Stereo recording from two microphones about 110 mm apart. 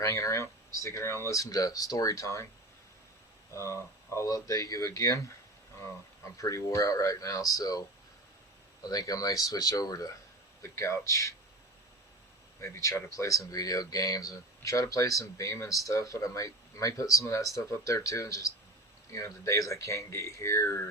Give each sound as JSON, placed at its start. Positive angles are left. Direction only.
{"t": 0.0, "sound": "speech", "side_deg": 25}
{"t": 3.5, "sound": "speech", "side_deg": 25}
{"t": 12.5, "sound": "speech", "side_deg": 25}